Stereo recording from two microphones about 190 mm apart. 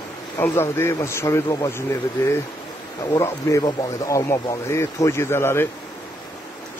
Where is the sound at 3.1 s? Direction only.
20° left (ahead or behind).